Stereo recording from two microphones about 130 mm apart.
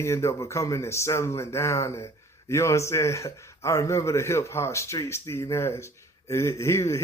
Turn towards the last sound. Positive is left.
turn(degrees=20)  # may be behind; listen again after turning